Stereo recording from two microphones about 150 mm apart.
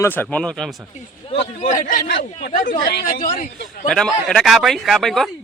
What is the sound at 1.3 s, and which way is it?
Speech, 55° left (ahead or behind).